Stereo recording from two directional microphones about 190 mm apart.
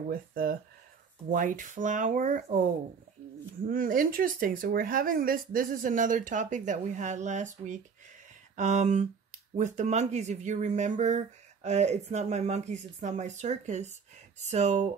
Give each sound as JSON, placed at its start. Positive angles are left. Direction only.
{"t": 0.1, "sound": "speech", "side_deg": -50}
{"t": 3.6, "sound": "speech", "side_deg": -45}